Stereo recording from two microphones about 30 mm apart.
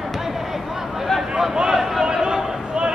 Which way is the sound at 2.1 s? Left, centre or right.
Right.